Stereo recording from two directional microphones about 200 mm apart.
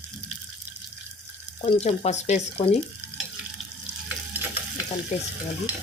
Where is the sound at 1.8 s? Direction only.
35° left (ahead or behind).